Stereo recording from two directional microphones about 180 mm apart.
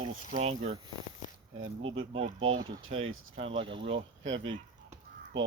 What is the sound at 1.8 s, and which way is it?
Speech, 30° right (ahead or behind).